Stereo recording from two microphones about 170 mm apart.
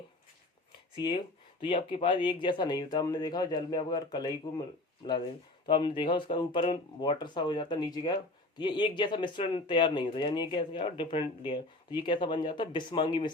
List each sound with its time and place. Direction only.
0.9 s speech: 25° left (ahead or behind)
5.6 s speech: 30° left (ahead or behind)